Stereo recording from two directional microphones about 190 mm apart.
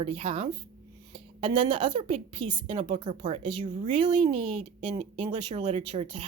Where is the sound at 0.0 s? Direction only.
30° right (ahead or behind).